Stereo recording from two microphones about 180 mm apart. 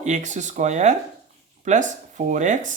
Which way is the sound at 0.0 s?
40° right (ahead or behind).